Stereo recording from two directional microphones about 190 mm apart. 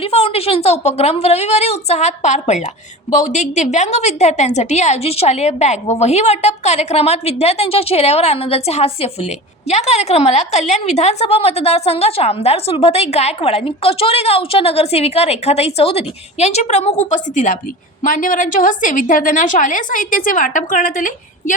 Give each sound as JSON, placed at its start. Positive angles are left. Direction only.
{"t": 0.0, "sound": "a woman's voice", "side_deg": 30}